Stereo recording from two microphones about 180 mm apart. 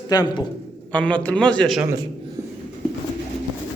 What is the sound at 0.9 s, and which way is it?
Speech, 5° left (ahead or behind).